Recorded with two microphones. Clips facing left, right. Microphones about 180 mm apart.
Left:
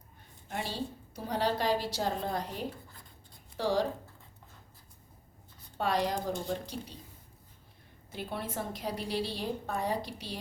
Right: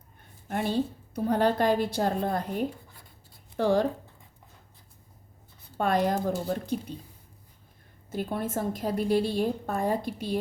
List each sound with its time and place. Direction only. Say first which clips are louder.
0.4 s a woman's voice: right 9 dB; 55° right (ahead or behind)
5.7 s a woman's voice: right 5 dB; 50° right (ahead or behind)
8.1 s a woman's voice: right 7 dB; 45° right (ahead or behind)